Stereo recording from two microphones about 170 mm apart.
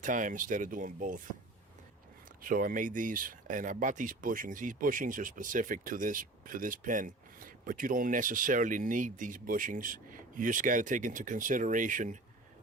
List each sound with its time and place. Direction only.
0.0 s speech: 50° right (ahead or behind)
2.4 s speech: 55° right (ahead or behind)